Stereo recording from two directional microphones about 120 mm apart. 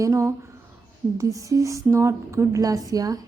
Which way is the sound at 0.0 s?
25° right (ahead or behind).